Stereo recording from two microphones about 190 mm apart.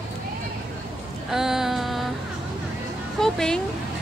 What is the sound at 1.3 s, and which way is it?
Speech, centre (ahead or behind).